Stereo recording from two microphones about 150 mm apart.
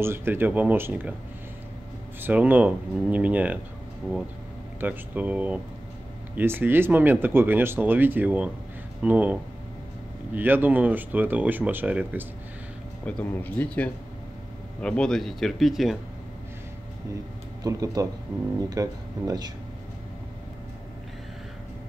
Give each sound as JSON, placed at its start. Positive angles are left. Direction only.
{"t": 0.0, "sound": "speech", "side_deg": -15}
{"t": 2.2, "sound": "speech", "side_deg": -10}
{"t": 4.7, "sound": "speech", "side_deg": -10}
{"t": 13.0, "sound": "speech", "side_deg": 10}
{"t": 17.6, "sound": "speech", "side_deg": -25}